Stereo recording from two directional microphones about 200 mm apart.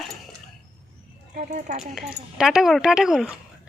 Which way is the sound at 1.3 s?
40° right (ahead or behind).